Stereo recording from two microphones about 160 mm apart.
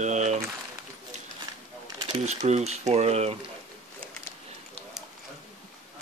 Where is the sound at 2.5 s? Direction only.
45° right (ahead or behind).